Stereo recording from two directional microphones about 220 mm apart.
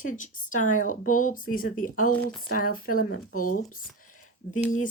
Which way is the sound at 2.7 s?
40° left (ahead or behind).